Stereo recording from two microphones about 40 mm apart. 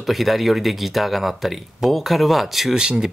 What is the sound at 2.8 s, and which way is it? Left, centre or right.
Speech, right.